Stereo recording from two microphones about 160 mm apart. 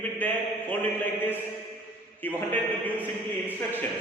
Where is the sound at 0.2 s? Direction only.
10° left (ahead or behind).